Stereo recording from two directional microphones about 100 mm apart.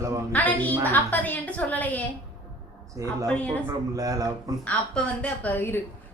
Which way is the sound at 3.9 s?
35° right (ahead or behind).